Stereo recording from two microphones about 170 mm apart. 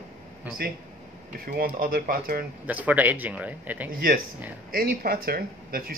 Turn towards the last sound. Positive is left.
turn(degrees=-60)  # may be behind; listen again after turning